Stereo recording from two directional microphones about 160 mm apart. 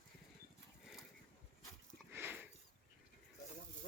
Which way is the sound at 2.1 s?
15° right (ahead or behind).